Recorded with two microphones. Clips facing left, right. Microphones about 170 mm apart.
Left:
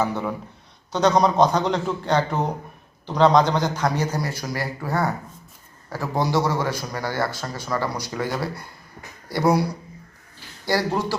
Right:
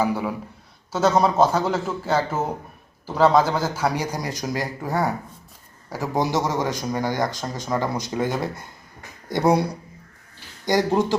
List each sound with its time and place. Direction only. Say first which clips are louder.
0.0 s a man's voice: right 1 dB; 10° right (ahead or behind)
10.7 s a man's voice: right 3 dB; 20° right (ahead or behind)